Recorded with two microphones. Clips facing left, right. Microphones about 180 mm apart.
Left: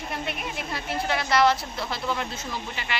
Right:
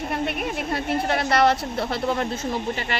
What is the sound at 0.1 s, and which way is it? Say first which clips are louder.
A woman's voice: right 5 dB; 55° right (ahead or behind).